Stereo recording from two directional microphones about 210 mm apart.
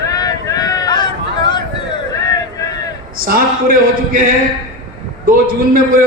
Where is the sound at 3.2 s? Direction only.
45° right (ahead or behind).